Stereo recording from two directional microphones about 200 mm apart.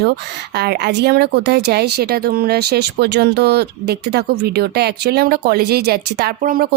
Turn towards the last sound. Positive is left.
turn(degrees=-45)  # may be behind; listen again after turning